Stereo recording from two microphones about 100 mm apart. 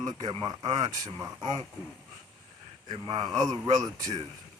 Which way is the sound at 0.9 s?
35° right (ahead or behind).